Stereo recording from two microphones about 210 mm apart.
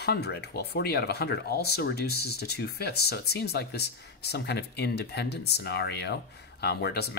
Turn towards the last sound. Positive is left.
turn(degrees=50)  # may be behind; listen again after turning